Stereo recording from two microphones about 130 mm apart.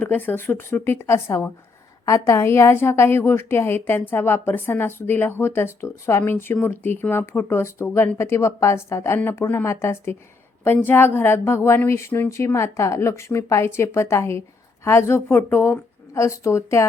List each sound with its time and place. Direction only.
0.0 s speech: 15° left (ahead or behind)